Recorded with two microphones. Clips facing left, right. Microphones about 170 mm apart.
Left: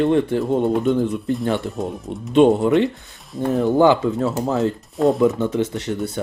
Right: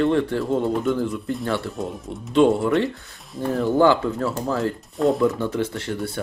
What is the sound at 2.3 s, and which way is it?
Speech, 20° left (ahead or behind).